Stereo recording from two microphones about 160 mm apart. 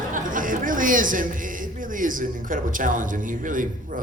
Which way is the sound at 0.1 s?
55° right (ahead or behind).